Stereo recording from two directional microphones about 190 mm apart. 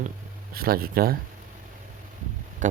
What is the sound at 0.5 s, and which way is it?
Speech, 50° right (ahead or behind).